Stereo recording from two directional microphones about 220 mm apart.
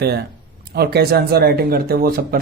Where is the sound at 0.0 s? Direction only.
45° right (ahead or behind).